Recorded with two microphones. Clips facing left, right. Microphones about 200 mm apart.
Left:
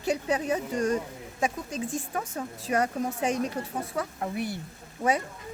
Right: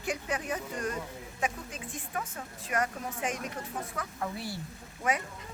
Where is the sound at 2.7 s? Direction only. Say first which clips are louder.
Left 6 dB; 35° left (ahead or behind).